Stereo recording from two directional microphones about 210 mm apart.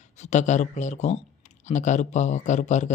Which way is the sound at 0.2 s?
35° left (ahead or behind).